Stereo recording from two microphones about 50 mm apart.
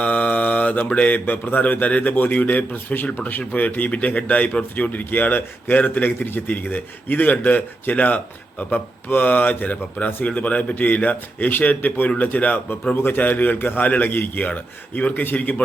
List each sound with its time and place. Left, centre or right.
0.0 s mantra: left
1.2 s a man's voice: left
13.0 s a man's voice: left